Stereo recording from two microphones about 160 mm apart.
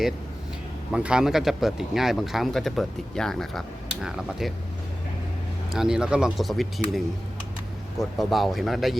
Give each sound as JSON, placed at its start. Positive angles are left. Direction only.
{"t": 0.9, "sound": "speech", "side_deg": -5}
{"t": 5.7, "sound": "speech", "side_deg": -5}
{"t": 8.2, "sound": "speech", "side_deg": 0}